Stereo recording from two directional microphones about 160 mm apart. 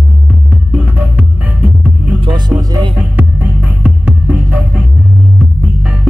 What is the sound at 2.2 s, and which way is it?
Music, 30° right (ahead or behind).